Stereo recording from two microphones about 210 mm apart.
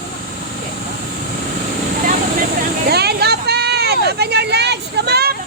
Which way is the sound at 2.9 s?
50° right (ahead or behind).